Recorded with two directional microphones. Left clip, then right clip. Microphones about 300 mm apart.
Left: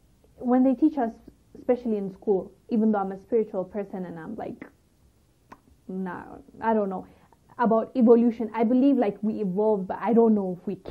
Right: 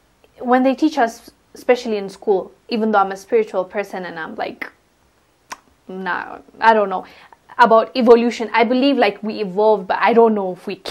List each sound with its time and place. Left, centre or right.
0.4 s a woman's voice: centre
2.1 s speech: right
2.7 s speech: centre
9.5 s speech: right
9.8 s speech: centre